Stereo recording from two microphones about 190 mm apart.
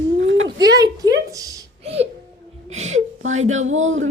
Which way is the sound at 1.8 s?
30° right (ahead or behind).